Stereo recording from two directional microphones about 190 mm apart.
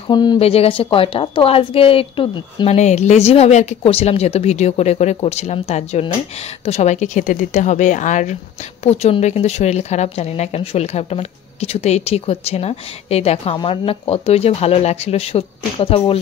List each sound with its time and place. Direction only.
0.1 s a woman's voice: 20° left (ahead or behind)